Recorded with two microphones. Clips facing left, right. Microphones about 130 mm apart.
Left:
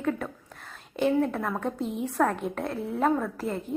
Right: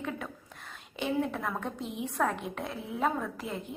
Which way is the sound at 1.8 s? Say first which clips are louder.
Left 6 dB; 40° left (ahead or behind).